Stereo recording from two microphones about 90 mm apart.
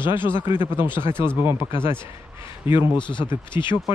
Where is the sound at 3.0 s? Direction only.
60° left (ahead or behind).